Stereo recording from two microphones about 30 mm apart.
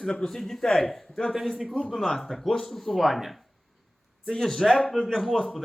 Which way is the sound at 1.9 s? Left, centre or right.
Centre.